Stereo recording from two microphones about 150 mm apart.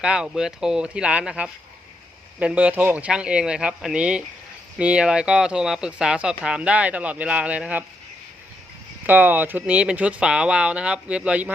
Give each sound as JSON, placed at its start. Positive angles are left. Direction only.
{"t": 0.0, "sound": "speech", "side_deg": -5}
{"t": 9.0, "sound": "speech", "side_deg": -10}